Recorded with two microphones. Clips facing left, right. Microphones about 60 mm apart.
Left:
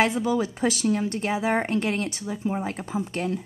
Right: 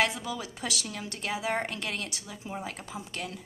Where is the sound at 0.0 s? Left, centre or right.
Left.